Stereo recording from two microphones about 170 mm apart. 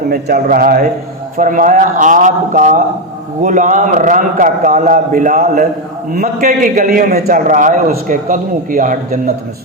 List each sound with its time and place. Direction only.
0.1 s a man's voice: 65° right (ahead or behind)